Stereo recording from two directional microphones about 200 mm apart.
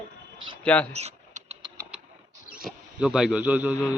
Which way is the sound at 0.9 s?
30° right (ahead or behind).